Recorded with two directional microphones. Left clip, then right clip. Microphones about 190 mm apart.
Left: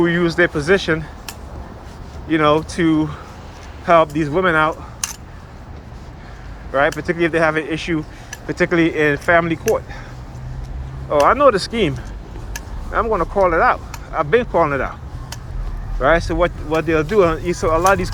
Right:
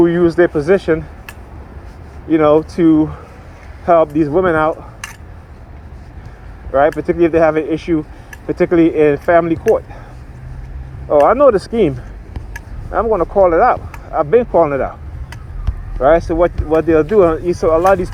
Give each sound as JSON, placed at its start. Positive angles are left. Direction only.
{"t": 0.0, "sound": "speech", "side_deg": -50}
{"t": 2.3, "sound": "speech", "side_deg": -50}
{"t": 6.7, "sound": "speech", "side_deg": -45}
{"t": 11.1, "sound": "speech", "side_deg": -50}
{"t": 16.0, "sound": "speech", "side_deg": -45}